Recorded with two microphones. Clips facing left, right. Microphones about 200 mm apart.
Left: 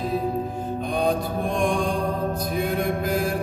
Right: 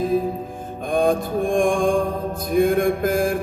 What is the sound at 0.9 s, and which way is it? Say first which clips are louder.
Mantra: right 6 dB; 50° right (ahead or behind).